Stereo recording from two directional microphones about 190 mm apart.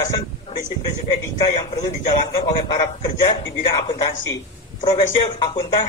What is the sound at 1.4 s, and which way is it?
A man's voice, 20° left (ahead or behind).